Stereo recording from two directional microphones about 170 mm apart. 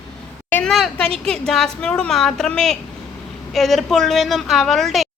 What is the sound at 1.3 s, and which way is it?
A woman's voice, 5° left (ahead or behind).